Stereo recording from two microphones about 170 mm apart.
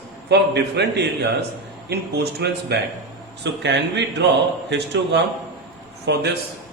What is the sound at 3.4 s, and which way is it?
Speech, 90° right.